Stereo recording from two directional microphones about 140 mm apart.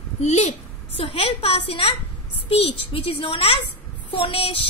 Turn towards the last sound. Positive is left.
turn(degrees=45)  # may be behind; listen again after turning